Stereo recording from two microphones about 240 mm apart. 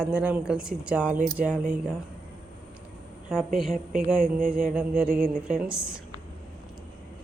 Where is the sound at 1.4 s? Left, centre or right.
Right.